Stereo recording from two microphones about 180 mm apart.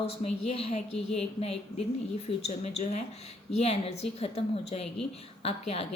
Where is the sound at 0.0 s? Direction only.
35° left (ahead or behind).